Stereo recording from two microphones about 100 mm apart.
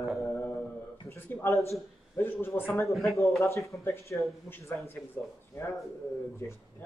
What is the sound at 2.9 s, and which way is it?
Speech, centre (ahead or behind).